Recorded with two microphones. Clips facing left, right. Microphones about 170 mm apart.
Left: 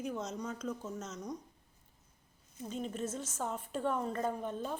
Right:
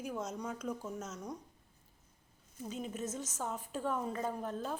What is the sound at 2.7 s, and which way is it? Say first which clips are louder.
A woman's voice: left 2 dB; 5° right (ahead or behind).